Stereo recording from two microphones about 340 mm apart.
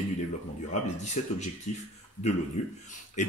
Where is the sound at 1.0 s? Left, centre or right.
Left.